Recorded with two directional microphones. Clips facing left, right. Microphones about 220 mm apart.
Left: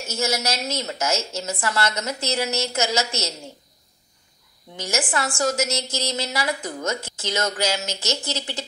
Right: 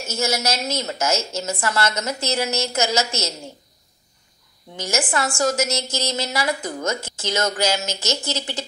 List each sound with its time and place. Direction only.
0.1 s a woman's voice: 45° right (ahead or behind)
4.7 s a woman's voice: 45° right (ahead or behind)